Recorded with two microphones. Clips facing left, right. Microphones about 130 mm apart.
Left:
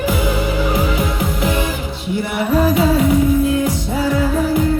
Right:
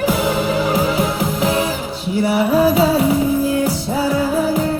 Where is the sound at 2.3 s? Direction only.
5° right (ahead or behind).